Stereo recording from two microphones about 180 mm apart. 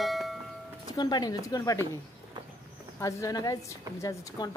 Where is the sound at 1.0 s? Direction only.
25° left (ahead or behind).